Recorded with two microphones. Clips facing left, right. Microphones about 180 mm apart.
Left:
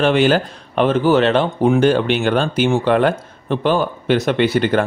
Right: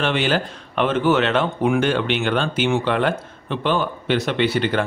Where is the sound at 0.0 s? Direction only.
45° left (ahead or behind).